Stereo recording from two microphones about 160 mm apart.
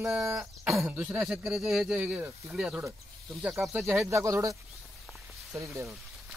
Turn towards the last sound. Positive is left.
turn(degrees=-20)  # may be behind; listen again after turning